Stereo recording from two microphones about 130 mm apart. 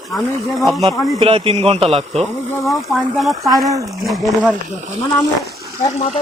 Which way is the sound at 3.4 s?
25° right (ahead or behind).